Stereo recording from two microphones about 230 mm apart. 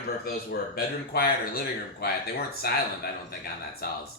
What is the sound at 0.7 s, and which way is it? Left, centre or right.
Speech, left.